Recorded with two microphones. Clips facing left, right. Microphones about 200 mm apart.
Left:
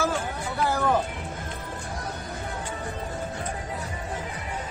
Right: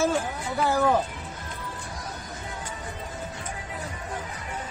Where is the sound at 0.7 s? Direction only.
10° right (ahead or behind).